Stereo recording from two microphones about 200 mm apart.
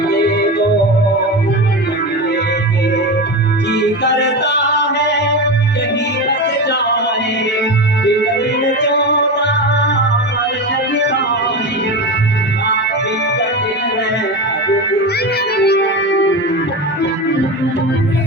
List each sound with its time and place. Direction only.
3.7 s music: 60° left (ahead or behind)
15.5 s music: 55° left (ahead or behind)